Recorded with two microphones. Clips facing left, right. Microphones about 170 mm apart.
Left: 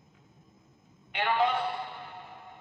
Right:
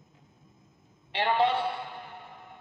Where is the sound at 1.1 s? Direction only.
30° right (ahead or behind).